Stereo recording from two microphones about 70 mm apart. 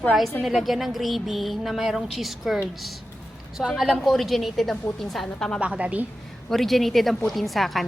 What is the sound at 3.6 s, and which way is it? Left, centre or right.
A woman's voice, centre.